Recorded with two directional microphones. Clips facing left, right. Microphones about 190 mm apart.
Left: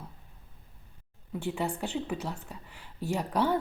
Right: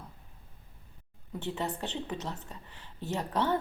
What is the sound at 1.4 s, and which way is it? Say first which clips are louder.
A woman's voice: left 3 dB; 10° left (ahead or behind).